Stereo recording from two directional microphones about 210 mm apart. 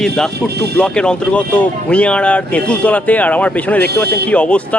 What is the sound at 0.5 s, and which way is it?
Speech, 50° right (ahead or behind).